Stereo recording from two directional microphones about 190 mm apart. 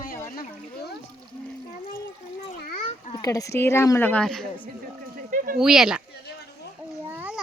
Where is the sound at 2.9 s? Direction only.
30° left (ahead or behind).